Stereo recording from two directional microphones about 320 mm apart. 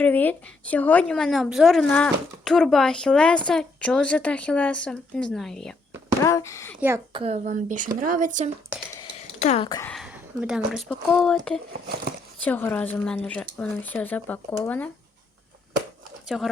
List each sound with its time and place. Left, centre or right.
0.0 s a woman's voice: centre
6.7 s speech: centre; by 8.4 s right
9.0 s a sound: left
9.9 s speech: centre
12.5 s a woman's voice: centre
16.3 s a woman's voice: centre